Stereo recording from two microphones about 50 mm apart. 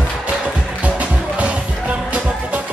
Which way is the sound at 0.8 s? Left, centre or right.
Right.